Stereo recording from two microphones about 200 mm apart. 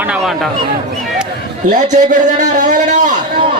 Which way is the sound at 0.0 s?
5° right (ahead or behind).